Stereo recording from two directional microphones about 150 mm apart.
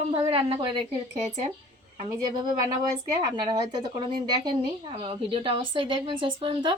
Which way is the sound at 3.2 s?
30° right (ahead or behind).